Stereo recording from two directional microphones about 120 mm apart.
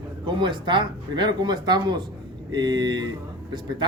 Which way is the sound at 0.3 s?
40° right (ahead or behind).